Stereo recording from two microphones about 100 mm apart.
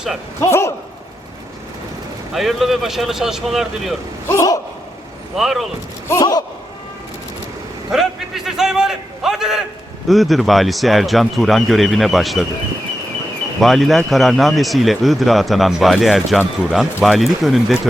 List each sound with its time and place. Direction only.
0.3 s speech: 25° left (ahead or behind)
2.3 s a man's voice: centre (ahead or behind)
4.3 s a sound: 30° left (ahead or behind)
5.4 s a man's voice: centre (ahead or behind)
6.1 s a sound: 35° left (ahead or behind)
7.9 s a man's voice: 5° right (ahead or behind)
13.6 s a man's voice: centre (ahead or behind)